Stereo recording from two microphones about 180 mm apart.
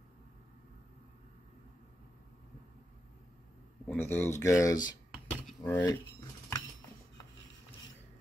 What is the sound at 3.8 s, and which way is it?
Speech, 10° left (ahead or behind).